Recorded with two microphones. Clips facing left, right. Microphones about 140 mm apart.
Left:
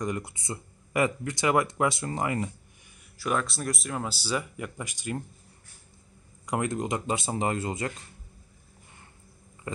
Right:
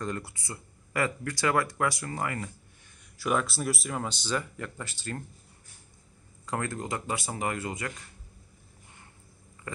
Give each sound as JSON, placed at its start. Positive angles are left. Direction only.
{"t": 0.0, "sound": "speech", "side_deg": 15}
{"t": 3.2, "sound": "speech", "side_deg": 0}
{"t": 6.4, "sound": "speech", "side_deg": 15}